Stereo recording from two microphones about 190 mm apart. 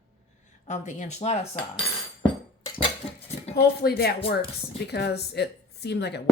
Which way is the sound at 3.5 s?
55° left (ahead or behind).